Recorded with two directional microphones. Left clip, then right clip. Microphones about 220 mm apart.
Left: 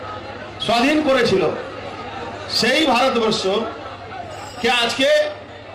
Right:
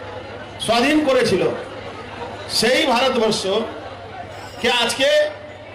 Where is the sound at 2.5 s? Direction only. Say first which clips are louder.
Even; 55° right (ahead or behind).